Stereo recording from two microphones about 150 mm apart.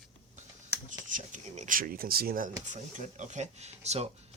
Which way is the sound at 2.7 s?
55° right (ahead or behind).